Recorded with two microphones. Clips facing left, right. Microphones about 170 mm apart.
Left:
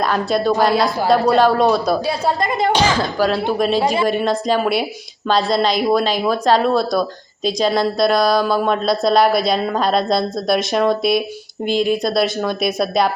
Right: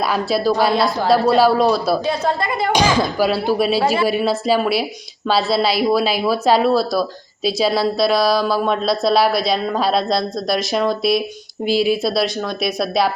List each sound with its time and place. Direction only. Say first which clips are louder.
0.0 s a woman's voice: left 1 dB; 5° right (ahead or behind)
2.0 s a woman's voice: left 1 dB; 15° left (ahead or behind)
2.7 s a woman's voice: right 1 dB; 10° right (ahead or behind)